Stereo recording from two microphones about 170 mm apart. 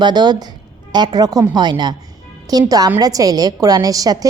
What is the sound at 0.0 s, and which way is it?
A woman's voice, 25° right (ahead or behind).